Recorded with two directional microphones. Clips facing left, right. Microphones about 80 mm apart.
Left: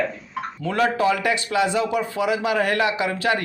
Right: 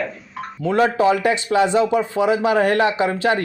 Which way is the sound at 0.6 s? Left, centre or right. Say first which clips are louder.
Right 4 dB; right.